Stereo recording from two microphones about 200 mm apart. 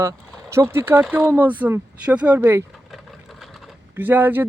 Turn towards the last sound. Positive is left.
turn(degrees=-10)  # may be behind; listen again after turning